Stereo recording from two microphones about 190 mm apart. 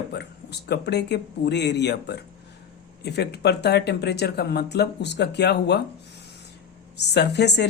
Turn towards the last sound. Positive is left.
turn(degrees=60)  # may be behind; listen again after turning